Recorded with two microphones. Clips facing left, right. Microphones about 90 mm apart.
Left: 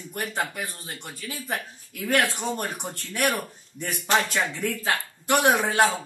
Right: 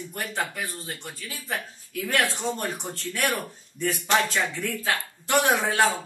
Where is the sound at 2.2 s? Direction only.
20° right (ahead or behind).